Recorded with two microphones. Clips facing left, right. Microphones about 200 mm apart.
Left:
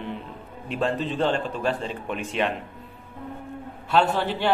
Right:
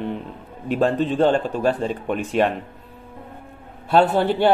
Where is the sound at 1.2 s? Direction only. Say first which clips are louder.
Right 7 dB; 40° right (ahead or behind).